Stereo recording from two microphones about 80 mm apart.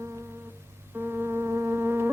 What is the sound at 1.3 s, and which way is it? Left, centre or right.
Insect, right.